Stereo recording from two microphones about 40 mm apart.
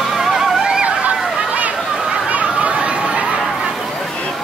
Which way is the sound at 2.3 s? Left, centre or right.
Right.